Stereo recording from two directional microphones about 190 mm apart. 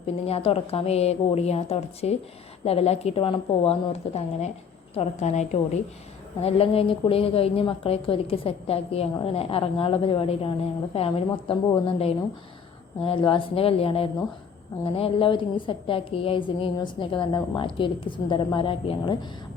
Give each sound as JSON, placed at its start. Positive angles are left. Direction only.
{"t": 0.3, "sound": "a woman's voice", "side_deg": 30}